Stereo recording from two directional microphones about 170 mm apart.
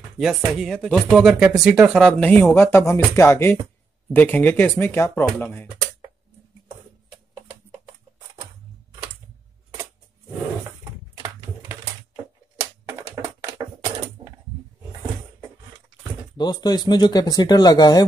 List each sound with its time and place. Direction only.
0.6 s speech: centre (ahead or behind)
2.0 s speech: 5° left (ahead or behind)
10.8 s typing: 20° right (ahead or behind)
12.8 s a sound: 15° right (ahead or behind)
16.3 s speech: 25° left (ahead or behind)